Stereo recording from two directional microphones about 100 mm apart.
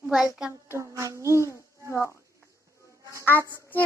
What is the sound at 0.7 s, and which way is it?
Speech, 30° right (ahead or behind).